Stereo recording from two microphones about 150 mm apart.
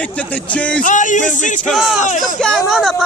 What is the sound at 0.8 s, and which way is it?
Speech, 55° left (ahead or behind).